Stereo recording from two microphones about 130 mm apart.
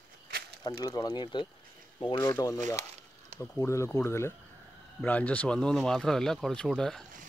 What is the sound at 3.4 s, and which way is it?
Speech, 15° left (ahead or behind).